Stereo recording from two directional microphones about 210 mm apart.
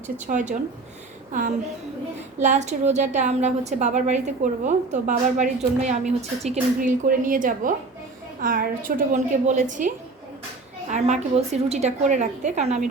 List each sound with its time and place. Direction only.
0.3 s a woman's voice: 35° right (ahead or behind)
10.8 s a woman's voice: 35° right (ahead or behind)